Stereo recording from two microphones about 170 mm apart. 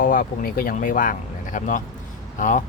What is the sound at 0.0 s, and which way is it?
Speech, 55° left (ahead or behind).